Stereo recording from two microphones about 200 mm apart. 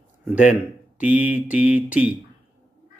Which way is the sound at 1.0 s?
5° right (ahead or behind).